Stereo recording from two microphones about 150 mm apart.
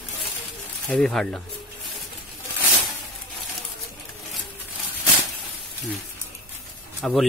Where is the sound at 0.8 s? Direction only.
Centre (ahead or behind).